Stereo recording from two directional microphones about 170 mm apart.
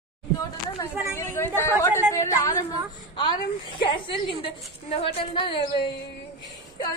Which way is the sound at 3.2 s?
30° left (ahead or behind).